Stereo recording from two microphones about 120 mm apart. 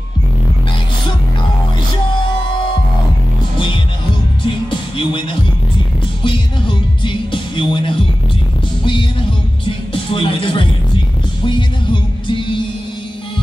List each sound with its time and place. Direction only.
3.5 s music: 45° left (ahead or behind)
9.9 s music: 45° left (ahead or behind)